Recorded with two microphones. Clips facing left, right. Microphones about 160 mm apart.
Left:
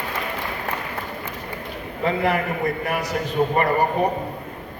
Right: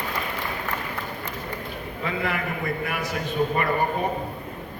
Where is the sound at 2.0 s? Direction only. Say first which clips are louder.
Left 7 dB; 35° left (ahead or behind).